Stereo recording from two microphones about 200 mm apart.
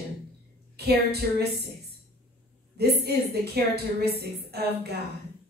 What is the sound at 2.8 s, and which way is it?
A woman's voice, 55° right (ahead or behind).